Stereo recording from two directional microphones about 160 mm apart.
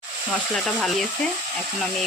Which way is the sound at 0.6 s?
5° left (ahead or behind).